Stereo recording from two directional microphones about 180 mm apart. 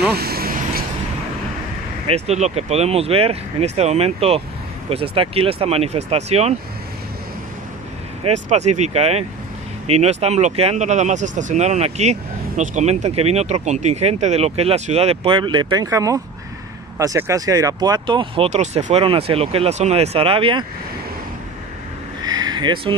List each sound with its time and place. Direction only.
0.1 s vehicle: 60° right (ahead or behind)
2.0 s speech: 35° right (ahead or behind)
8.2 s speech: 40° right (ahead or behind)
22.2 s a sound: 20° right (ahead or behind)